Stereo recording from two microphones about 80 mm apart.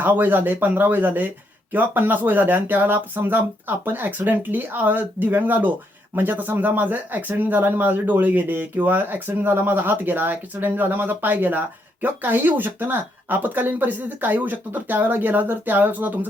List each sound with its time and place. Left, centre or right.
0.0 s speech: right